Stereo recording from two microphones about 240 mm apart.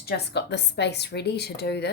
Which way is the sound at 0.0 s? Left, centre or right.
Left.